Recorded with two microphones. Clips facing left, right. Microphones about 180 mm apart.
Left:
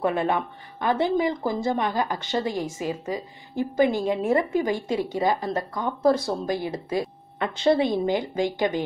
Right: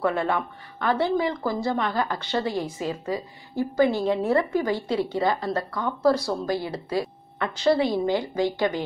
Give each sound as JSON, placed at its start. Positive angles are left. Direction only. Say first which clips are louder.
{"t": 0.0, "sound": "a woman's voice", "louder": "left 1 dB", "side_deg": 20}